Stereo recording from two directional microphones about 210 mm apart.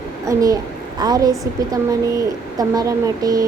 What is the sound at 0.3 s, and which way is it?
A child's voice, 15° right (ahead or behind).